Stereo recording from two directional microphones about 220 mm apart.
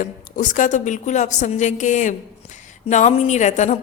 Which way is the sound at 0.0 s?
35° left (ahead or behind).